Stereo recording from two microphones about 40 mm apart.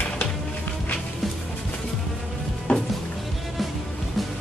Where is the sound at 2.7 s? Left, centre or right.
Left.